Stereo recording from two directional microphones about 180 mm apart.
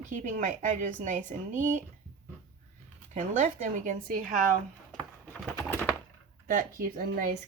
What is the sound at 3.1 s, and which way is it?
A woman's voice, 45° right (ahead or behind).